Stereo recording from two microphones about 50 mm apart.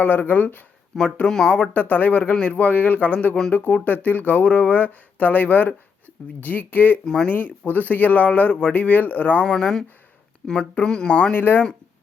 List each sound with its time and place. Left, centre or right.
0.0 s speech: left
0.9 s speech: centre
1.7 s speech: left
2.3 s speech: left
2.6 s speech: left
7.0 s speech: centre
7.3 s speech: left
8.7 s speech: left
9.5 s speech: centre
11.3 s speech: left